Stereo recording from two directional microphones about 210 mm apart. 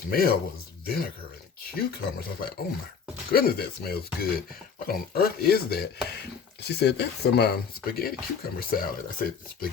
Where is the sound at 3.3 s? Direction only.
45° left (ahead or behind).